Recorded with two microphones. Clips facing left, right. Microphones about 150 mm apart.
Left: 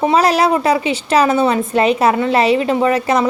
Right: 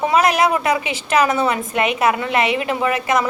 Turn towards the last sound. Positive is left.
turn(degrees=30)  # may be behind; listen again after turning